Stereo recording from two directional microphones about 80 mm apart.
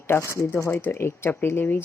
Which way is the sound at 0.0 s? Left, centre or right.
Left.